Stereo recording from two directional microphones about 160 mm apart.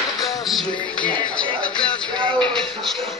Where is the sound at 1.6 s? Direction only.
5° left (ahead or behind).